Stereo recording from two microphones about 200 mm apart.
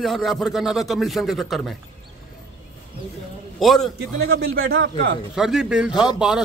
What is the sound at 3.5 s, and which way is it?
Speech, centre (ahead or behind).